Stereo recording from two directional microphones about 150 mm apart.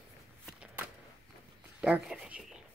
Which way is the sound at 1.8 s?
5° right (ahead or behind).